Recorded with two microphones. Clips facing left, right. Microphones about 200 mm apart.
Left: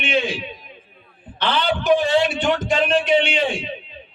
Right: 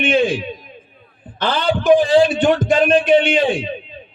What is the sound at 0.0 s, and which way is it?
A man's voice, 50° right (ahead or behind).